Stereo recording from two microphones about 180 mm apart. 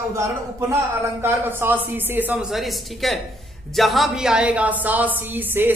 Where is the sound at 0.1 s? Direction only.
15° right (ahead or behind).